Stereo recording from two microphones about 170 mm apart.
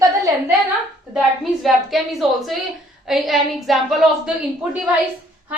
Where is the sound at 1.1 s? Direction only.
Centre (ahead or behind).